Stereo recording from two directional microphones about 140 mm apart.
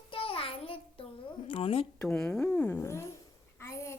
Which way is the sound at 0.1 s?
40° left (ahead or behind).